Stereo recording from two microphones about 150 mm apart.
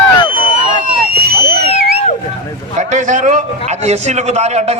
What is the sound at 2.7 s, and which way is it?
A man's voice, 50° right (ahead or behind).